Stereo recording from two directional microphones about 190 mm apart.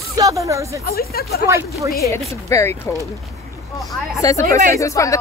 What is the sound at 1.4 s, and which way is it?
Speech, 15° right (ahead or behind).